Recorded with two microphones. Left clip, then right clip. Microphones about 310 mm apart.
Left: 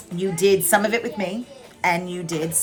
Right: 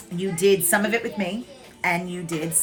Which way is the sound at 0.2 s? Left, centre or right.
Centre.